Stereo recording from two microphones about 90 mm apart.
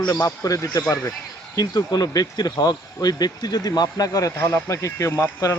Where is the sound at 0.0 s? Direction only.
45° left (ahead or behind).